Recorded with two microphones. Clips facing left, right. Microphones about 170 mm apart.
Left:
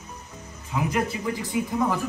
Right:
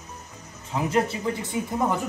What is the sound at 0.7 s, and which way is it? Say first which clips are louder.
Speech: right 2 dB; 30° right (ahead or behind).